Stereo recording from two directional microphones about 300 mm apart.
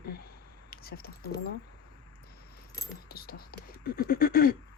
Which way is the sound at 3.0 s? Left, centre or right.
Left.